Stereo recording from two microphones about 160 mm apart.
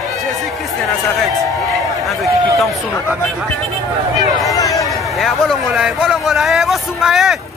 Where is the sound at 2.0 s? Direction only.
Centre (ahead or behind).